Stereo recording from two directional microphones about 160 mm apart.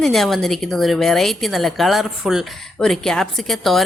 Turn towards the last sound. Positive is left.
turn(degrees=0)  # may be behind; listen again after turning